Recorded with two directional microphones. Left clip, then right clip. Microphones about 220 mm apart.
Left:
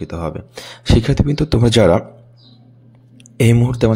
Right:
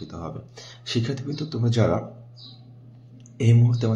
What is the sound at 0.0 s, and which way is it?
Speech, 40° left (ahead or behind).